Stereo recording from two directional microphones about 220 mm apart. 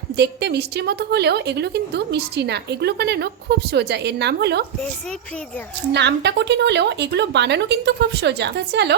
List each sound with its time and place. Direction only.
0.2 s a woman's voice: 50° right (ahead or behind)
5.9 s a woman's voice: 50° right (ahead or behind)